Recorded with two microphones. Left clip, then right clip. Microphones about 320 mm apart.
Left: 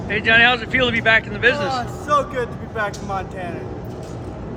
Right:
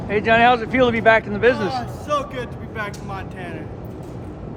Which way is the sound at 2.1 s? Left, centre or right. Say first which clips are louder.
Left 5 dB; centre.